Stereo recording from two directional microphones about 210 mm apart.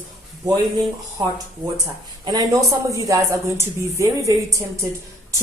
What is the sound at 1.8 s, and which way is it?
Speech, 15° right (ahead or behind).